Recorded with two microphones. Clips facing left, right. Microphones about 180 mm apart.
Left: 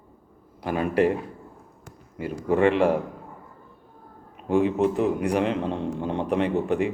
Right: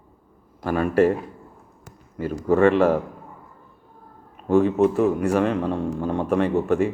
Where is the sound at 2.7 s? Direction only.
15° left (ahead or behind).